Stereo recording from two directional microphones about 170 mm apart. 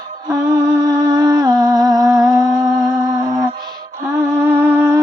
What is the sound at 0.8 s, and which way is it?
Music, 25° right (ahead or behind).